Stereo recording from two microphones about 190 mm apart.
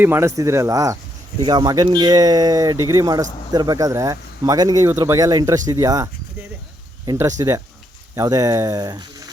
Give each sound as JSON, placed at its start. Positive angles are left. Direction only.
{"t": 0.0, "sound": "speech", "side_deg": -15}